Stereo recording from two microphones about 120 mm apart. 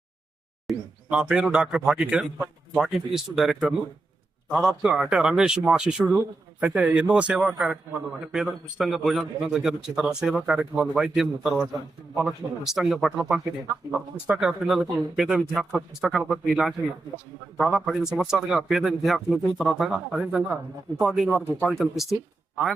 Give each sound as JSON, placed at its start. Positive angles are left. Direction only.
{"t": 0.7, "sound": "a man's voice", "side_deg": -5}
{"t": 20.2, "sound": "a man's voice", "side_deg": -15}
{"t": 21.0, "sound": "a man's voice", "side_deg": 0}